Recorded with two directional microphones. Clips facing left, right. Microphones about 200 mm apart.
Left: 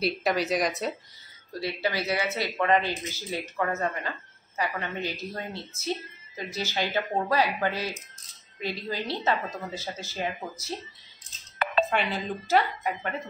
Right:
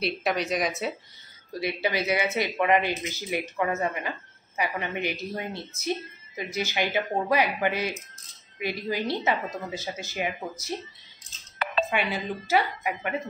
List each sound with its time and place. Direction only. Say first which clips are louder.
0.0 s speech: left 1 dB; centre (ahead or behind)
1.6 s a woman's voice: right 2 dB; 20° right (ahead or behind)
11.5 s music: left 2 dB; 50° left (ahead or behind)
11.9 s a woman's voice: even; 10° right (ahead or behind)